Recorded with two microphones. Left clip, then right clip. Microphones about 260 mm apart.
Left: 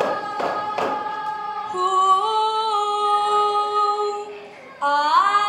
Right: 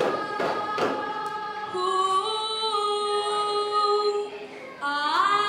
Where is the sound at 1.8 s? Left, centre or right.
Centre.